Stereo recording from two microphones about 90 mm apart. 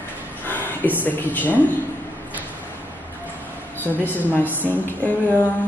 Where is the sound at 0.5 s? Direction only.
20° left (ahead or behind).